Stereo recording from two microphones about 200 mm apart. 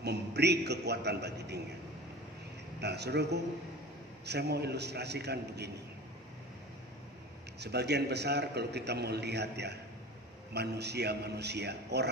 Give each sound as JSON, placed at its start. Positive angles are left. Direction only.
{"t": 0.0, "sound": "a man's voice", "side_deg": -55}
{"t": 2.8, "sound": "a man's voice", "side_deg": -55}
{"t": 7.6, "sound": "a man's voice", "side_deg": -55}